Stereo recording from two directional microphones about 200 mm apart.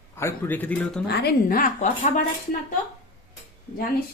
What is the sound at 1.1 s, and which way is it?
A woman's voice, 55° left (ahead or behind).